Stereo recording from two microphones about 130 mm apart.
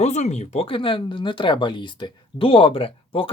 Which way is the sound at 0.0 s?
60° left (ahead or behind).